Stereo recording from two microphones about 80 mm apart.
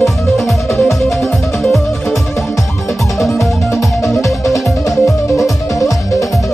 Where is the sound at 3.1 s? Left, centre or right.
Centre.